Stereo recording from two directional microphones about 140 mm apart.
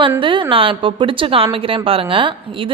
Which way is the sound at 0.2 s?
35° right (ahead or behind).